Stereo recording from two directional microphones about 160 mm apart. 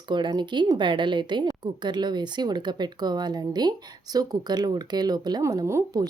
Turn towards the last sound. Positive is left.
turn(degrees=-20)  # may be behind; listen again after turning